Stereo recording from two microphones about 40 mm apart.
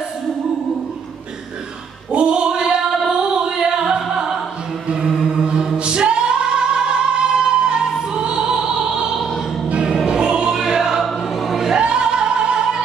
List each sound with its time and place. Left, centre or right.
2.1 s female singing: right
4.8 s chant: right
5.2 s mantra: centre
5.8 s music: right
8.1 s opera: centre
9.7 s choir: right
10.0 s music: right
10.5 s choir: centre
11.8 s music: right